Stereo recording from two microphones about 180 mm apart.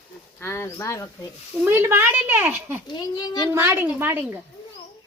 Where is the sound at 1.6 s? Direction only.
15° right (ahead or behind).